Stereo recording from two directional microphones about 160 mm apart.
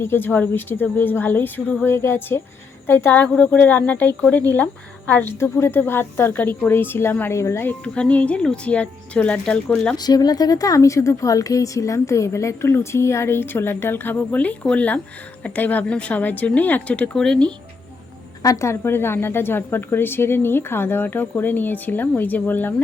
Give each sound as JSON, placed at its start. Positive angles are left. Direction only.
{"t": 0.0, "sound": "speech", "side_deg": 15}
{"t": 10.0, "sound": "speech", "side_deg": 25}
{"t": 18.4, "sound": "speech", "side_deg": 20}